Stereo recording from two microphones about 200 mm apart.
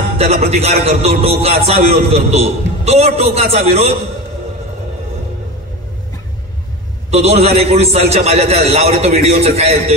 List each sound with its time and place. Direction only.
0.2 s a man's voice: 30° right (ahead or behind)
7.1 s a man's voice: 30° right (ahead or behind)